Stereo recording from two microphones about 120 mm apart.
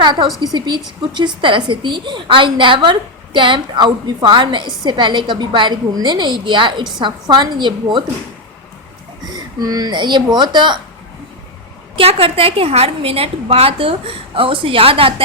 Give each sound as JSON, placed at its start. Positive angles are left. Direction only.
{"t": 0.0, "sound": "a woman's voice", "side_deg": -40}
{"t": 9.3, "sound": "a woman's voice", "side_deg": -30}
{"t": 11.9, "sound": "a woman's voice", "side_deg": -50}